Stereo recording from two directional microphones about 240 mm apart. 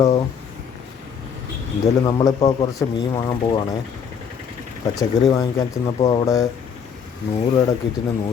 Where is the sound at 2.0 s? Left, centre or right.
Centre.